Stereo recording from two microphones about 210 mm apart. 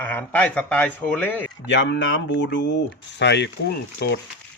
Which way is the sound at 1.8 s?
60° left (ahead or behind).